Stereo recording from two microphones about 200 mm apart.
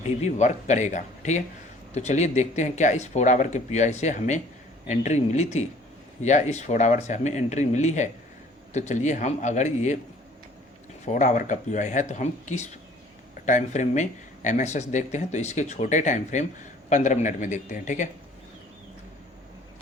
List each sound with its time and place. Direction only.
0.2 s speech: 35° left (ahead or behind)
11.0 s speech: 35° left (ahead or behind)